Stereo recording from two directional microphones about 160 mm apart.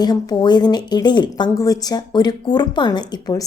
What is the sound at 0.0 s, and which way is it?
Speech, 25° left (ahead or behind).